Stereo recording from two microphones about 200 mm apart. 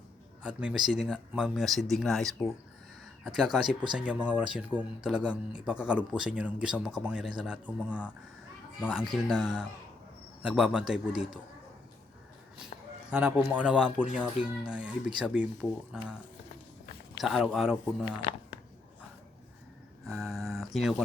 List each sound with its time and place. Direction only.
0.4 s speech: 5° right (ahead or behind)
12.7 s a sound: 40° left (ahead or behind)
13.1 s speech: 5° right (ahead or behind)
17.2 s speech: centre (ahead or behind)
20.1 s speech: centre (ahead or behind)